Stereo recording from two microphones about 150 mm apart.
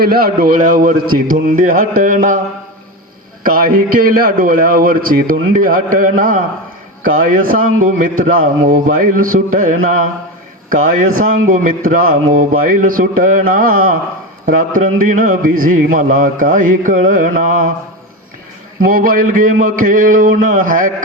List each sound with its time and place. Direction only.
0.0 s a man's voice: 85° right; by 2.4 s 60° right (ahead or behind)
3.4 s a man's voice: 70° right (ahead or behind)
18.9 s a man's voice: 70° right (ahead or behind)